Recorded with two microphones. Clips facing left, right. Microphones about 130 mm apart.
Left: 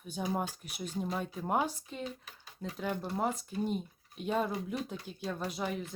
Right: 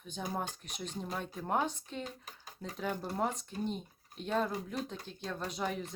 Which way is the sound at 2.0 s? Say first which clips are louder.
Left 5 dB; 40° right (ahead or behind).